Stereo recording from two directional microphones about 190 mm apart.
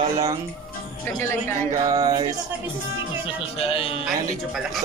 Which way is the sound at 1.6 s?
15° right (ahead or behind).